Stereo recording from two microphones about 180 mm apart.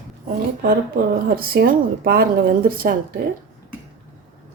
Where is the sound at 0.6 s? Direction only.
55° right (ahead or behind).